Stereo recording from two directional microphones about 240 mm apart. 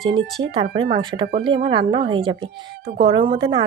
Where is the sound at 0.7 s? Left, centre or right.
Centre.